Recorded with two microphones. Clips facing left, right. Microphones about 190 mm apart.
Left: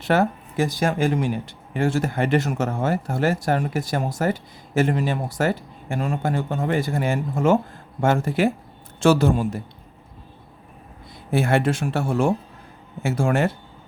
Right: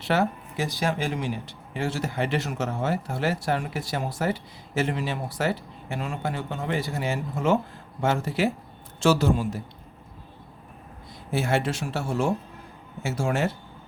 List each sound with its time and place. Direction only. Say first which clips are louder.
0.0 s speech: left 4 dB; 50° left (ahead or behind)
11.3 s speech: left 5 dB; 55° left (ahead or behind)